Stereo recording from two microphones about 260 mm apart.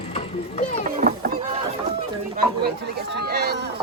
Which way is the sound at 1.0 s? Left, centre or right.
Right.